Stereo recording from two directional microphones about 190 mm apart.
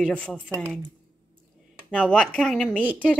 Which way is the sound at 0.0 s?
5° left (ahead or behind).